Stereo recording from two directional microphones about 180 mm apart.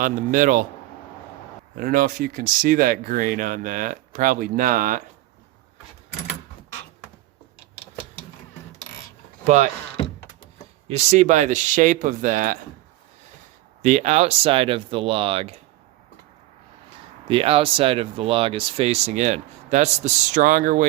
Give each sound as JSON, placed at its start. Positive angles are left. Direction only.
{"t": 0.0, "sound": "speech", "side_deg": -45}
{"t": 1.7, "sound": "speech", "side_deg": -55}
{"t": 10.8, "sound": "speech", "side_deg": -40}
{"t": 13.8, "sound": "speech", "side_deg": -40}
{"t": 17.2, "sound": "speech", "side_deg": -30}